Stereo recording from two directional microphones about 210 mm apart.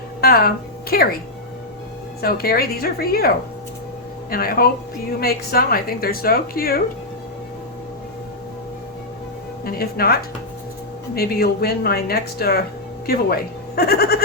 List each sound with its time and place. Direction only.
0.2 s a woman's voice: 45° left (ahead or behind)
2.2 s speech: 45° left (ahead or behind)
9.6 s speech: 45° left (ahead or behind)